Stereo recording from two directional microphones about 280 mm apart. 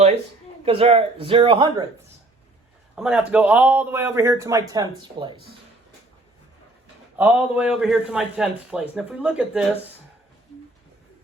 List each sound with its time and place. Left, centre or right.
0.6 s speech: centre
2.9 s a man's voice: centre
7.2 s a man's voice: centre